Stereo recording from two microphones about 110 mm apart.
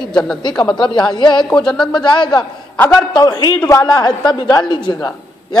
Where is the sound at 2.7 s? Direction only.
20° left (ahead or behind).